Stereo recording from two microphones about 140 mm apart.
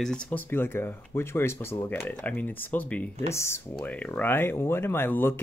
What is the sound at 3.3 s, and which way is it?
Speech, 20° left (ahead or behind).